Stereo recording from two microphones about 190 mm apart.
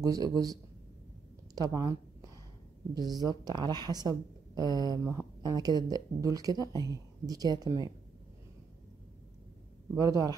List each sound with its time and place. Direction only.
0.0 s speech: 20° right (ahead or behind)
1.5 s a sound: 20° right (ahead or behind)
2.9 s speech: 20° right (ahead or behind)
9.9 s speech: 20° right (ahead or behind)